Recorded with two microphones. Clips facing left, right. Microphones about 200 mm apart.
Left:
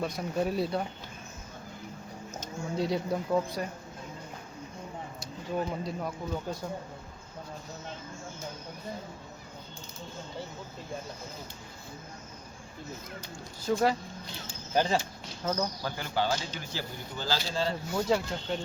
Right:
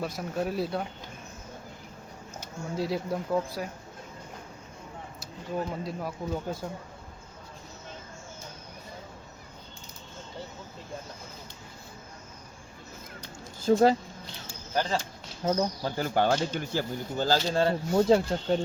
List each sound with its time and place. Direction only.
0.0 s speech: centre (ahead or behind)
2.4 s speech: 5° right (ahead or behind)
5.8 s speech: centre (ahead or behind)
13.7 s speech: 30° right (ahead or behind)
14.4 s a sound: 15° left (ahead or behind)
15.4 s speech: 25° right (ahead or behind)
16.0 s speech: 50° right (ahead or behind)
17.9 s speech: 35° right (ahead or behind)